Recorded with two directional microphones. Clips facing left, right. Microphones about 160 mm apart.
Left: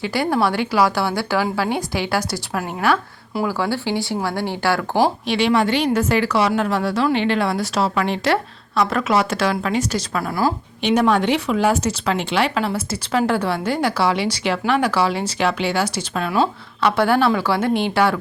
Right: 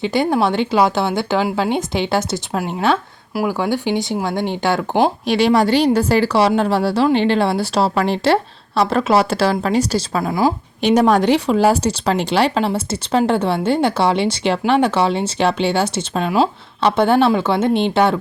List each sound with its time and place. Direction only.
0.0 s speech: 20° right (ahead or behind)
5.3 s a woman's voice: 40° right (ahead or behind); by 10.5 s 20° right (ahead or behind)
10.8 s speech: 40° right (ahead or behind); by 18.2 s 25° right (ahead or behind)